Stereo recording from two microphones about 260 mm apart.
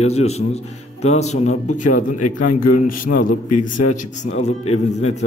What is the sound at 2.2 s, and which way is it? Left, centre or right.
Speech, left.